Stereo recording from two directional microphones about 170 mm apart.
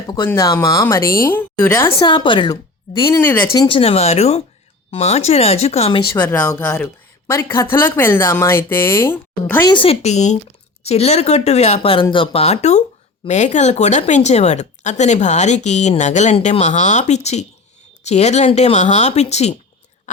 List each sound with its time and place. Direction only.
0.3 s speech: 20° left (ahead or behind)
3.5 s speech: 30° left (ahead or behind)
6.1 s speech: 10° left (ahead or behind)
9.6 s speech: 30° left (ahead or behind)